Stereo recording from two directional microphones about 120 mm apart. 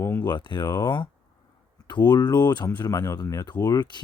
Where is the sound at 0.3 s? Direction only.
40° left (ahead or behind).